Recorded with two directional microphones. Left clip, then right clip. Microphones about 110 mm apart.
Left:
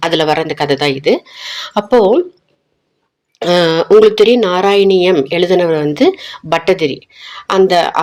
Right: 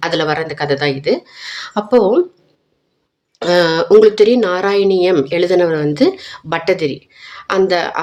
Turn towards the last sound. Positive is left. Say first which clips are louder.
# left 4 dB
turn(degrees=15)  # may be behind; listen again after turning